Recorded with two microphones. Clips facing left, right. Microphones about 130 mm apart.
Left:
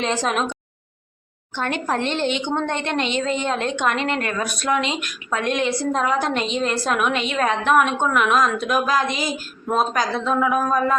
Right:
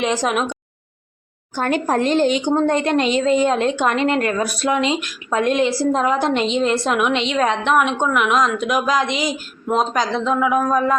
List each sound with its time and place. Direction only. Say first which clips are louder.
0.0 s a woman's voice: right 2 dB; 10° right (ahead or behind)
1.5 s a woman's voice: right 5 dB; 40° right (ahead or behind); by 10.6 s 10° right (ahead or behind)